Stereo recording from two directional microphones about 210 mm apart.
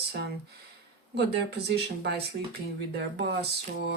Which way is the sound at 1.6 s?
50° right (ahead or behind).